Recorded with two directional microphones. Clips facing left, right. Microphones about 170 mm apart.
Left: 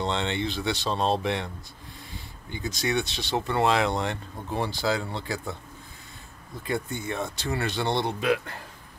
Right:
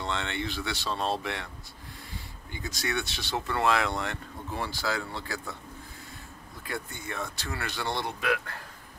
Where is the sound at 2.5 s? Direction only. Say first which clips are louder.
Left 5 dB; 20° left (ahead or behind).